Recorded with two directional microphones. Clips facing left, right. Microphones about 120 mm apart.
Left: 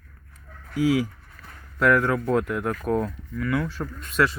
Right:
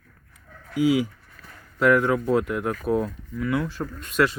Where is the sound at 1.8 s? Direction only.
5° right (ahead or behind).